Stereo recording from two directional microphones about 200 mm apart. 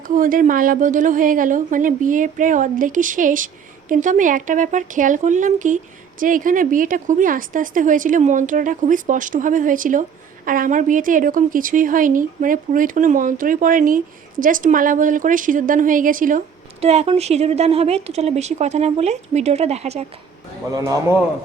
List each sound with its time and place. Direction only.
0.1 s a woman's voice: 40° right (ahead or behind)
16.8 s a woman's voice: 30° right (ahead or behind)
20.7 s a man's voice: 15° right (ahead or behind)